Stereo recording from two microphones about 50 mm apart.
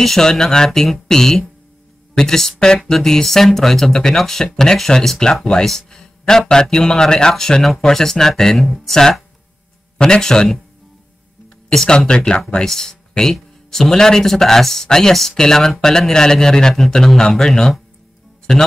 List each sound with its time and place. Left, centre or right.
0.0 s speech: centre
0.7 s speech: centre